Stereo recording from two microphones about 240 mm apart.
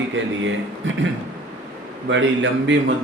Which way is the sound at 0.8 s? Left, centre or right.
Right.